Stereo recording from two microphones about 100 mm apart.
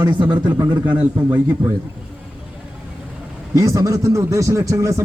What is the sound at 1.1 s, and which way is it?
Speech, 20° right (ahead or behind).